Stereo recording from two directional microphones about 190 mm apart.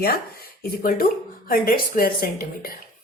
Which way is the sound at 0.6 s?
50° left (ahead or behind).